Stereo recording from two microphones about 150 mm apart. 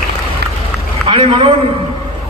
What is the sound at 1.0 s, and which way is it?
Speech, 35° right (ahead or behind).